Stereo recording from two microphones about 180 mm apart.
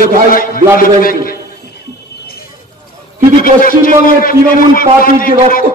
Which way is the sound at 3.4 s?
50° left (ahead or behind).